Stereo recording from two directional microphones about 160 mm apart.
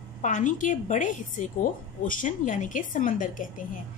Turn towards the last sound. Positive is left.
turn(degrees=55)  # may be behind; listen again after turning